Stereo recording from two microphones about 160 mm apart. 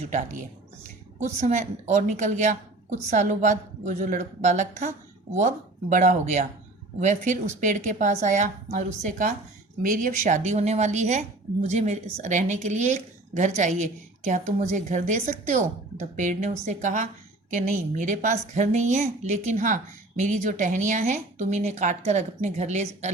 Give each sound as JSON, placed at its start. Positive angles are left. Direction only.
{"t": 0.1, "sound": "a woman's voice", "side_deg": -50}